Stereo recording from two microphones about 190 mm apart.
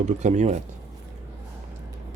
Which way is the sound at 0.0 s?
35° right (ahead or behind).